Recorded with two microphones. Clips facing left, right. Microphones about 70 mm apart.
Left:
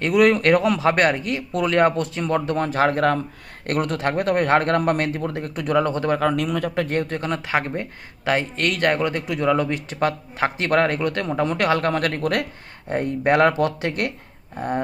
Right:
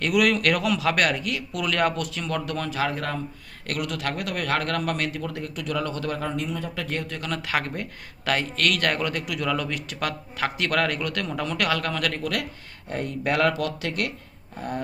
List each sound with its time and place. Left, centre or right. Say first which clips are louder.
0.0 s speech: left 5 dB; left
2.6 s speech: left 8 dB; left
3.7 s speech: left 6 dB; left
6.1 s speech: left 8 dB; left
6.7 s speech: left 8 dB; left